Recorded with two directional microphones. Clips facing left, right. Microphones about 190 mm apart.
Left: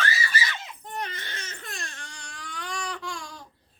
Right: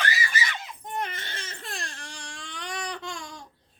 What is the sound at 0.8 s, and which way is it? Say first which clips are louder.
Crying: right 3 dB; 20° right (ahead or behind).